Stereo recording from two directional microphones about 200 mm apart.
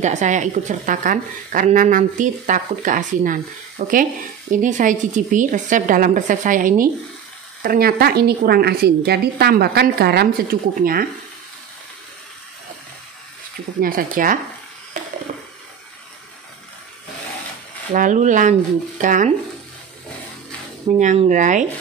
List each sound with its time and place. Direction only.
0.0 s a woman's voice: 35° right (ahead or behind)
13.7 s a woman's voice: 45° right (ahead or behind)
17.9 s speech: 40° right (ahead or behind)
21.0 s speech: 35° right (ahead or behind)